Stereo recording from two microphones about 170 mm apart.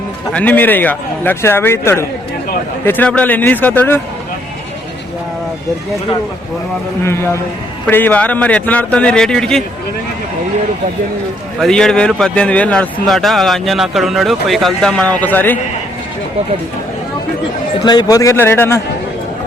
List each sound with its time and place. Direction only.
0.3 s speech: 10° left (ahead or behind)
7.9 s speech: 10° left (ahead or behind)
11.6 s speech: 5° left (ahead or behind)
17.8 s speech: 25° left (ahead or behind)